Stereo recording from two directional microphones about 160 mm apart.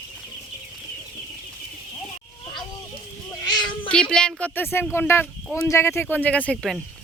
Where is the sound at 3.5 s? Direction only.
25° left (ahead or behind).